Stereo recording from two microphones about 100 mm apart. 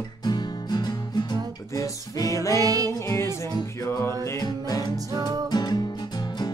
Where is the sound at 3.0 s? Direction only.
30° left (ahead or behind).